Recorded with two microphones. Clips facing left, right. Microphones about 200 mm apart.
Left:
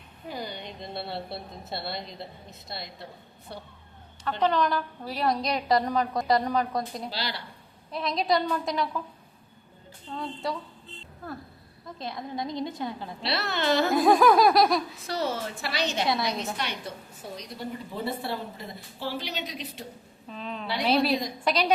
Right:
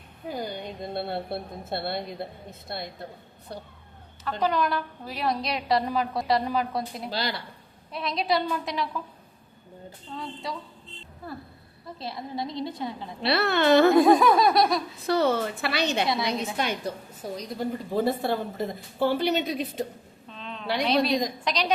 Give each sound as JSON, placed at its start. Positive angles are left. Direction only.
{"t": 0.3, "sound": "a woman's voice", "side_deg": -45}
{"t": 4.2, "sound": "a woman's voice", "side_deg": -5}
{"t": 7.1, "sound": "a woman's voice", "side_deg": -50}
{"t": 7.9, "sound": "a woman's voice", "side_deg": 0}
{"t": 11.9, "sound": "a woman's voice", "side_deg": -5}
{"t": 13.2, "sound": "a woman's voice", "side_deg": -60}
{"t": 13.9, "sound": "a woman's voice", "side_deg": 0}
{"t": 15.0, "sound": "a woman's voice", "side_deg": -60}
{"t": 16.6, "sound": "a woman's voice", "side_deg": -45}
{"t": 20.3, "sound": "a sound", "side_deg": 5}
{"t": 20.8, "sound": "a woman's voice", "side_deg": 5}